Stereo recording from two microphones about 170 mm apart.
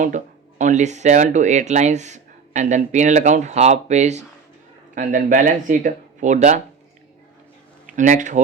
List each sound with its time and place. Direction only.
0.6 s speech: 45° right (ahead or behind)
7.9 s speech: 45° right (ahead or behind)